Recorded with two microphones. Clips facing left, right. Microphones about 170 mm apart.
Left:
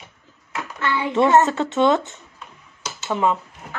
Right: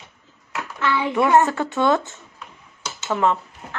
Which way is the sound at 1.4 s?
20° left (ahead or behind).